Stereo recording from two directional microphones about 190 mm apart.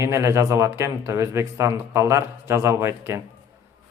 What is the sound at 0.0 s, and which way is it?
Speech, 15° right (ahead or behind).